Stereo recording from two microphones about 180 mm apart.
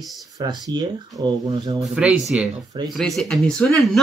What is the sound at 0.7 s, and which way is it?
Speech, 25° right (ahead or behind).